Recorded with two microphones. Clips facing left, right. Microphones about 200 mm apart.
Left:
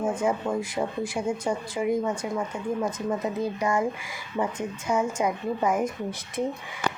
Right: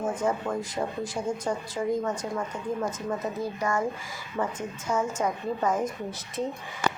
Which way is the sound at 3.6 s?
15° left (ahead or behind).